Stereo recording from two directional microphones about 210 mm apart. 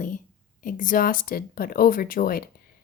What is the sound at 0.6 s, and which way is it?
A woman's voice, 40° left (ahead or behind).